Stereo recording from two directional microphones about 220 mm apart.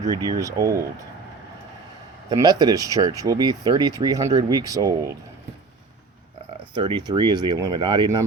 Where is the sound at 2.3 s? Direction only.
20° right (ahead or behind).